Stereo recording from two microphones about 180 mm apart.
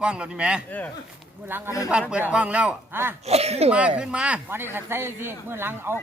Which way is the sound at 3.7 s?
5° right (ahead or behind).